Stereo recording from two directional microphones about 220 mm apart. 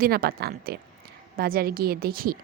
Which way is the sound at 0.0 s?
40° right (ahead or behind).